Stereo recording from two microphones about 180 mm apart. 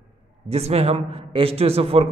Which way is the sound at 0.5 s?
35° right (ahead or behind).